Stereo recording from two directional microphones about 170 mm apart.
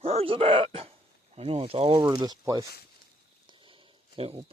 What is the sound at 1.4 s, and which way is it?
Speech, 35° right (ahead or behind).